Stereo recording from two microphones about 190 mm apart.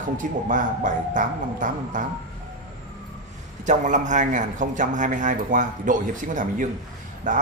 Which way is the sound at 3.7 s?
40° right (ahead or behind).